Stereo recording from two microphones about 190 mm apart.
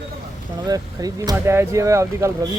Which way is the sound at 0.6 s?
20° right (ahead or behind).